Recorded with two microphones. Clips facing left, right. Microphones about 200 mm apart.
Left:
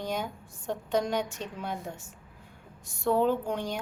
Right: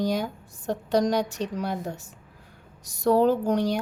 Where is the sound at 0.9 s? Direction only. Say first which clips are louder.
Right 6 dB; 35° right (ahead or behind).